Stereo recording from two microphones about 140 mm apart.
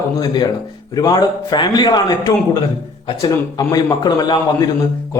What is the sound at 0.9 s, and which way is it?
A man's voice, 30° left (ahead or behind).